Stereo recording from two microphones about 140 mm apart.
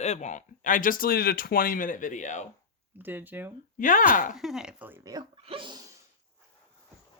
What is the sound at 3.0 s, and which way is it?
Speech, 15° right (ahead or behind).